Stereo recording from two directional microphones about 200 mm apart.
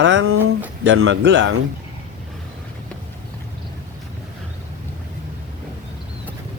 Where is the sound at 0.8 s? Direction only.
70° right (ahead or behind).